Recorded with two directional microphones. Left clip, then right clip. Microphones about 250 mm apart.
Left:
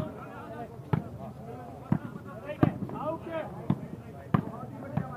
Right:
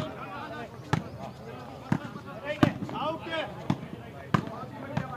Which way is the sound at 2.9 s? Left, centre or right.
Right.